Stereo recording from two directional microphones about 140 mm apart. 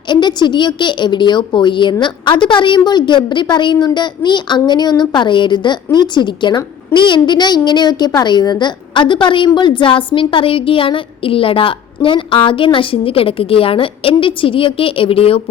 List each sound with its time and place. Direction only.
0.1 s a woman's voice: 30° left (ahead or behind)